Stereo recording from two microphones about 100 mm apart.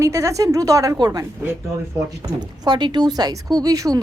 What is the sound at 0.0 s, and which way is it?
A woman's voice, 30° right (ahead or behind).